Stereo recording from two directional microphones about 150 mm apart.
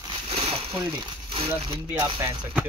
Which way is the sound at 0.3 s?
40° right (ahead or behind).